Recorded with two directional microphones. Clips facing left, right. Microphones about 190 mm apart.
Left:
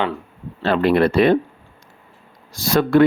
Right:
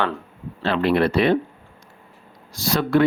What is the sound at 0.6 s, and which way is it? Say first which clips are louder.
Speech: left 3 dB; 45° left (ahead or behind).